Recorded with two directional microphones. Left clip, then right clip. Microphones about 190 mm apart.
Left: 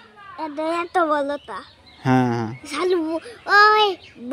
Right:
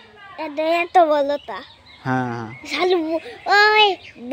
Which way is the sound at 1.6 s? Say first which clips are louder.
Even; 55° left (ahead or behind).